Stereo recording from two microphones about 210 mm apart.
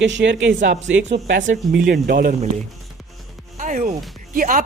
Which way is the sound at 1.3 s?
40° right (ahead or behind).